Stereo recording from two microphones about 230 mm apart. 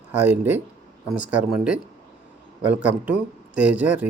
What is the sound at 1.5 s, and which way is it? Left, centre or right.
Speech, centre.